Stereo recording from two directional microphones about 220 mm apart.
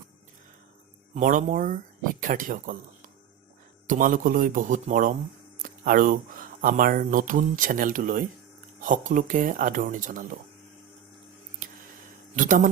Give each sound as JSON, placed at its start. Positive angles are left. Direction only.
{"t": 1.1, "sound": "speech", "side_deg": -35}
{"t": 3.8, "sound": "speech", "side_deg": -35}
{"t": 11.6, "sound": "a sound", "side_deg": -40}
{"t": 12.4, "sound": "speech", "side_deg": -35}